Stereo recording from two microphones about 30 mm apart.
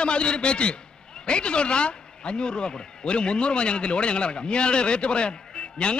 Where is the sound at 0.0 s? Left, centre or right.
Left.